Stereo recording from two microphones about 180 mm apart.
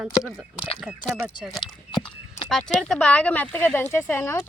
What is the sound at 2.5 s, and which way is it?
Speech, 5° left (ahead or behind).